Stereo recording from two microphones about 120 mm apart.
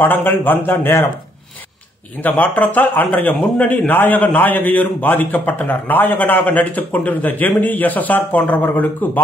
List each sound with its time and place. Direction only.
0.0 s speech: 15° left (ahead or behind)
2.2 s speech: 15° left (ahead or behind)